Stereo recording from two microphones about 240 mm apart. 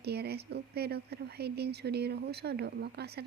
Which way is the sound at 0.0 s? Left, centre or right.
Right.